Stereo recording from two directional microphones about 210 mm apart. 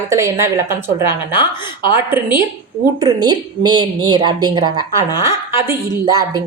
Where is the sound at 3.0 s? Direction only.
20° right (ahead or behind).